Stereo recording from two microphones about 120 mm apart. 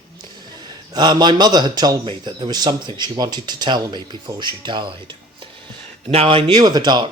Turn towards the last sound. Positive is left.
turn(degrees=-35)  # may be behind; listen again after turning